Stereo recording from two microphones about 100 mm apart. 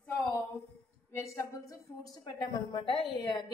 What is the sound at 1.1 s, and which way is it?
Speech, 30° left (ahead or behind).